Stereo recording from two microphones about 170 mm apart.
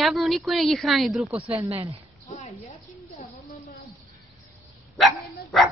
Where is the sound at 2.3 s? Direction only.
45° left (ahead or behind).